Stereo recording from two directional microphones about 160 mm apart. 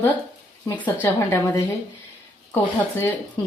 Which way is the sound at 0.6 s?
10° left (ahead or behind).